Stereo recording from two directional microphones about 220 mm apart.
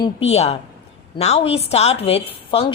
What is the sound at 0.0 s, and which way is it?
Speech, 30° left (ahead or behind).